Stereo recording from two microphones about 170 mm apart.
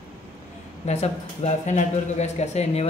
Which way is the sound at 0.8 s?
40° left (ahead or behind).